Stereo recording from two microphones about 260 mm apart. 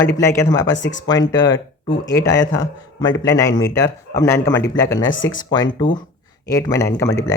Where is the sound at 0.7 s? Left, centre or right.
Left.